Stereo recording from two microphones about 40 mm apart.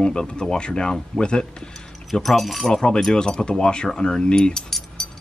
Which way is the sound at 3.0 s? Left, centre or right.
Centre.